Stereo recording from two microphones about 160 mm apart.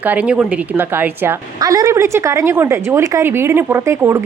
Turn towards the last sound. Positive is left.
turn(degrees=-15)  # may be behind; listen again after turning